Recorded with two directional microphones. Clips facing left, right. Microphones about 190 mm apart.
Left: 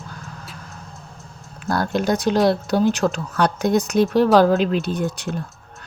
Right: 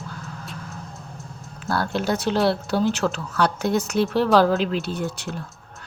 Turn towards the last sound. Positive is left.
turn(degrees=15)  # may be behind; listen again after turning